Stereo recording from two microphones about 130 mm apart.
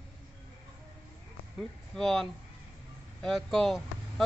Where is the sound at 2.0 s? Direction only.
5° left (ahead or behind).